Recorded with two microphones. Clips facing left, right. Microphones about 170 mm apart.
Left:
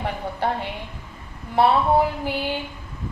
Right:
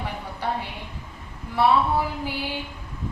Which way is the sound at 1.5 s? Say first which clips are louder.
Left 3 dB; 60° left (ahead or behind).